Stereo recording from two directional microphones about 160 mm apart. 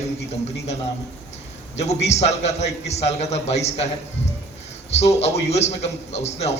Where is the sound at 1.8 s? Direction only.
45° left (ahead or behind).